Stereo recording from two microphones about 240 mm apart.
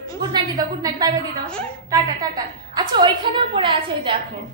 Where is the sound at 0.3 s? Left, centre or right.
Centre.